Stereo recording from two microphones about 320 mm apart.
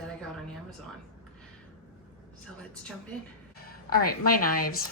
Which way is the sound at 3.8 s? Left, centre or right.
Left.